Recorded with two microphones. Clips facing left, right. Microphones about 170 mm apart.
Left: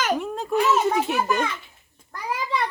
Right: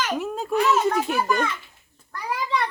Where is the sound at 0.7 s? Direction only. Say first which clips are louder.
Even; 5° left (ahead or behind).